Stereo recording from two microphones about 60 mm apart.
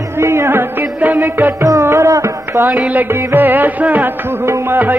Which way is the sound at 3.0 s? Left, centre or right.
Right.